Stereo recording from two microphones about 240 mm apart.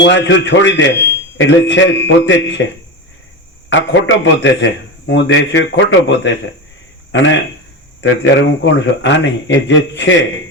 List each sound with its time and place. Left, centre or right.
0.0 s a man's voice: left
3.7 s a man's voice: left